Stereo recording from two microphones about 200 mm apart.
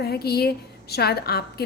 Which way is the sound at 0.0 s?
50° left (ahead or behind).